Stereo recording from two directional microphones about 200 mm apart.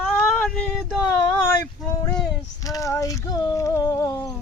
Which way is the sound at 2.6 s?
15° left (ahead or behind).